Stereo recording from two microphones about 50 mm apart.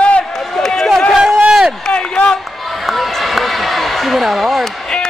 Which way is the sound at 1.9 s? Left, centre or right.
Left.